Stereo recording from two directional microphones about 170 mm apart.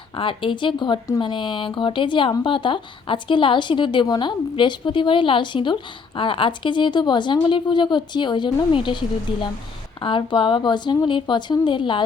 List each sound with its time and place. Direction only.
0.2 s speech: 30° left (ahead or behind)